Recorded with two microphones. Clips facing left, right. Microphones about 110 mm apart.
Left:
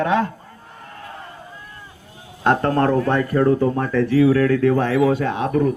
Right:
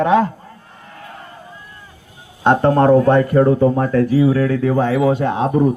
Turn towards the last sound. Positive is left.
turn(degrees=-25)  # may be behind; listen again after turning